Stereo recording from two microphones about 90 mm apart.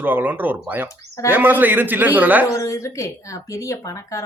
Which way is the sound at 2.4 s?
35° left (ahead or behind).